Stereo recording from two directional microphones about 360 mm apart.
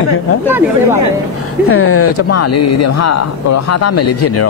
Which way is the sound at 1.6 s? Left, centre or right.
Left.